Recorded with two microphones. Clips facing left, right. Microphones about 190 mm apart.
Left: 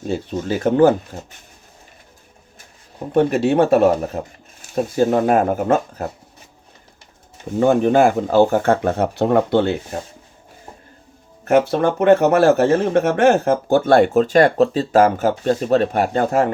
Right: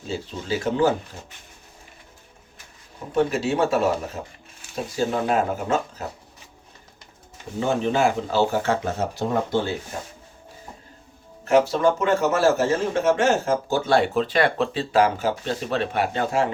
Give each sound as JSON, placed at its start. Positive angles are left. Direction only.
{"t": 0.1, "sound": "speech", "side_deg": 55}
{"t": 3.1, "sound": "speech", "side_deg": 55}
{"t": 7.6, "sound": "speech", "side_deg": 55}
{"t": 11.4, "sound": "speech", "side_deg": 55}